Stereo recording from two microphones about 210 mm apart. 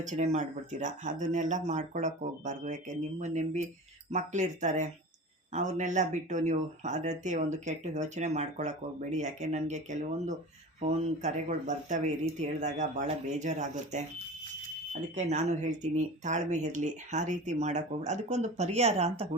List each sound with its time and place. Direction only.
0.0 s speech: 35° right (ahead or behind)
15.1 s speech: 35° right (ahead or behind)